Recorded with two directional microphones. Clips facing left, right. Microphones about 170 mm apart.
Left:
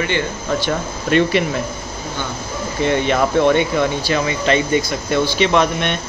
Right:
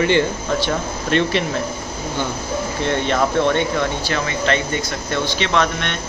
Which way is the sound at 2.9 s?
10° left (ahead or behind).